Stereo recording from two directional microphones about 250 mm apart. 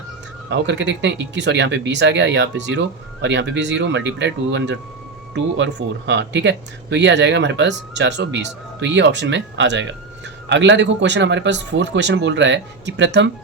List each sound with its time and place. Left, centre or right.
0.5 s speech: right